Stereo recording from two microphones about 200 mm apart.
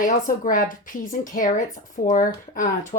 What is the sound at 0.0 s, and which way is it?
Speech, 40° left (ahead or behind).